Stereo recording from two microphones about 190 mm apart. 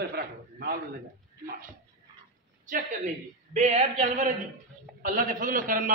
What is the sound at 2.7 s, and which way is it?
A woman's voice, 45° right (ahead or behind).